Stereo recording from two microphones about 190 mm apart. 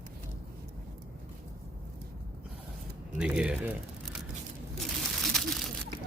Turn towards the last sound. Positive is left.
turn(degrees=0)  # may be behind; listen again after turning